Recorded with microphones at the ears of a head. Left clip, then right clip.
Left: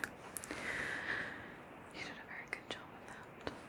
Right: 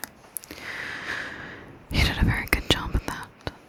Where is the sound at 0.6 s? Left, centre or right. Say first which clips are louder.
Right 8 dB; right.